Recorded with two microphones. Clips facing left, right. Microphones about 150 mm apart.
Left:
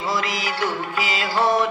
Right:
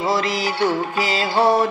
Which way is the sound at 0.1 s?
35° right (ahead or behind).